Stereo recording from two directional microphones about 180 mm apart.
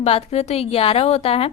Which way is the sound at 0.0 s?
35° left (ahead or behind).